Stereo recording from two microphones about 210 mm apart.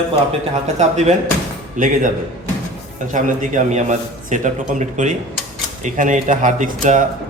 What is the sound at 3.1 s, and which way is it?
A man's voice, 35° right (ahead or behind).